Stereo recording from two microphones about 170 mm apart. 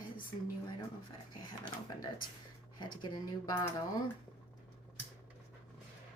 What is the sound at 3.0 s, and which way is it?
Speech, 25° left (ahead or behind).